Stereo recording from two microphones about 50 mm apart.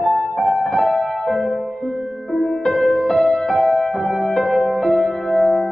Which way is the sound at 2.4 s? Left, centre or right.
Centre.